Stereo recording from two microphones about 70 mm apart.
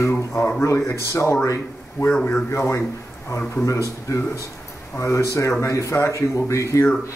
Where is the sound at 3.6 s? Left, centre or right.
Left.